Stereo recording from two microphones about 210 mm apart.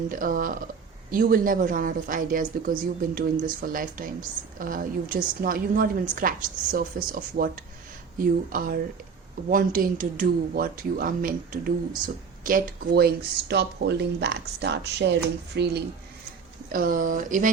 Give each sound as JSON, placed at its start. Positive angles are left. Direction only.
{"t": 0.1, "sound": "a woman's voice", "side_deg": -40}
{"t": 16.7, "sound": "a woman's voice", "side_deg": -40}